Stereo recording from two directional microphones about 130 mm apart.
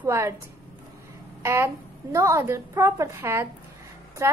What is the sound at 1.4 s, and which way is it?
Speech, 20° right (ahead or behind).